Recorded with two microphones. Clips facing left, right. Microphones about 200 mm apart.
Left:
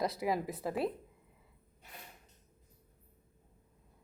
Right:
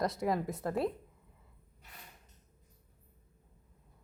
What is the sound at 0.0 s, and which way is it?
Speech, centre (ahead or behind).